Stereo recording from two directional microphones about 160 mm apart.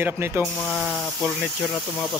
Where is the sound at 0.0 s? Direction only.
15° right (ahead or behind).